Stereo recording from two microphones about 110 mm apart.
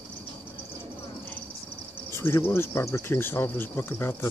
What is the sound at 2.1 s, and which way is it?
Speech, 20° left (ahead or behind).